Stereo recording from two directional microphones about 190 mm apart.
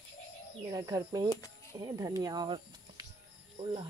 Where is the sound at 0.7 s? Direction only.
20° right (ahead or behind).